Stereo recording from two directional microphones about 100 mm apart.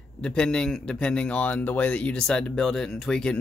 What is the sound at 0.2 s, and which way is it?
A man's voice, 10° left (ahead or behind).